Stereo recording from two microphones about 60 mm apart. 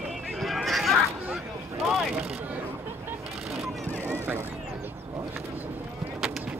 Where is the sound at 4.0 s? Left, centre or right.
Right.